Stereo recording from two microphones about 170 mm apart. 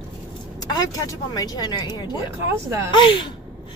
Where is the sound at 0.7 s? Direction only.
20° left (ahead or behind).